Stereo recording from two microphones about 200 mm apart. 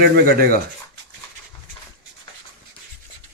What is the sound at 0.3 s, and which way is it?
Speech, 50° right (ahead or behind).